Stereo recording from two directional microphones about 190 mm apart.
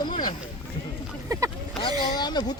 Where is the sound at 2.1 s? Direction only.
20° left (ahead or behind).